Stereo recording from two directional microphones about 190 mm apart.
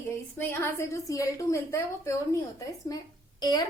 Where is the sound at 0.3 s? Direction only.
15° left (ahead or behind).